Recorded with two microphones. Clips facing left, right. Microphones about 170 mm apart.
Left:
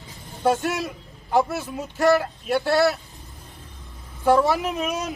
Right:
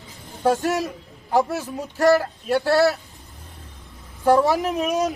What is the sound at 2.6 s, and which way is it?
Speech, 40° right (ahead or behind).